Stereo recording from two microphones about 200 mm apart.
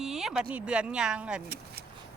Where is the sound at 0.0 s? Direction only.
Centre (ahead or behind).